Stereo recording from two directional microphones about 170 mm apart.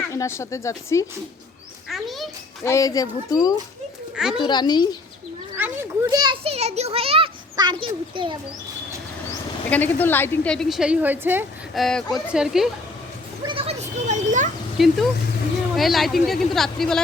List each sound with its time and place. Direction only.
0.1 s speech: 20° left (ahead or behind)
1.9 s a woman's voice: centre (ahead or behind)
2.6 s speech: 20° left (ahead or behind)
4.1 s a child's voice: 5° right (ahead or behind)
4.4 s speech: 25° left (ahead or behind)
5.5 s a child's voice: 10° right (ahead or behind); by 8.4 s 30° right (ahead or behind)
9.6 s a woman's voice: 10° left (ahead or behind); by 11.4 s 10° right (ahead or behind)
11.7 s a woman's voice: centre (ahead or behind)
13.4 s a sound: 30° right (ahead or behind); by 14.5 s 45° right (ahead or behind)
14.8 s a woman's voice: centre (ahead or behind)